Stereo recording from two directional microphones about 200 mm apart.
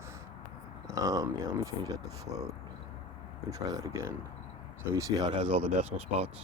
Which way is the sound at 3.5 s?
15° right (ahead or behind).